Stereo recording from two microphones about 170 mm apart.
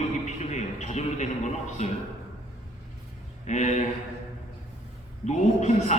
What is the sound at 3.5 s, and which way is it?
Speech, 45° left (ahead or behind).